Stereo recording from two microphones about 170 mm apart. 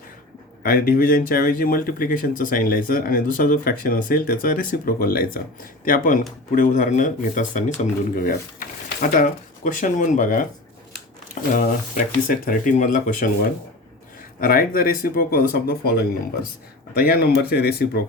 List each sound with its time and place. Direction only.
0.6 s speech: 60° left (ahead or behind)
11.5 s speech: 50° left (ahead or behind)
14.4 s speech: 60° left (ahead or behind)